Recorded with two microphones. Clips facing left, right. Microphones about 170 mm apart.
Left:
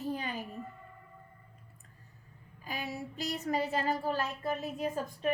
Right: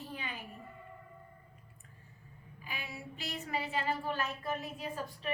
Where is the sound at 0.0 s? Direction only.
40° left (ahead or behind).